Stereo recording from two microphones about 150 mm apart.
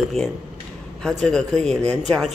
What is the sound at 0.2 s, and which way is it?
Speech, 45° right (ahead or behind).